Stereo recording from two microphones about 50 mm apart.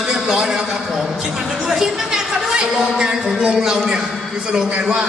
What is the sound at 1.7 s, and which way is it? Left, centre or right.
A man's voice, centre.